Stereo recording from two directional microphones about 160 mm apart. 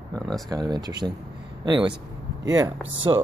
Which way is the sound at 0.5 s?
25° right (ahead or behind).